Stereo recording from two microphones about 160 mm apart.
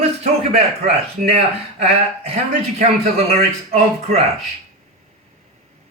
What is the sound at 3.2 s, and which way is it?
Speech, 40° right (ahead or behind).